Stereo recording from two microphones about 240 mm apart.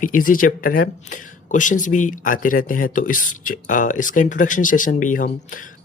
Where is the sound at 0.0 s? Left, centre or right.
Left.